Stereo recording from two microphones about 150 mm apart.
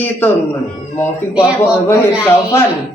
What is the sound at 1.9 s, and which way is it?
Speech, 20° left (ahead or behind).